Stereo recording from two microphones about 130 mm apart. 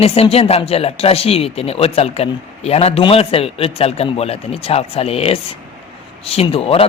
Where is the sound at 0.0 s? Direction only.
50° left (ahead or behind).